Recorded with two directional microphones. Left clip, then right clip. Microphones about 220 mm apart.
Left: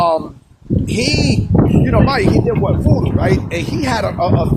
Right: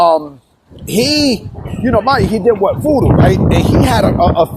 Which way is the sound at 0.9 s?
25° right (ahead or behind).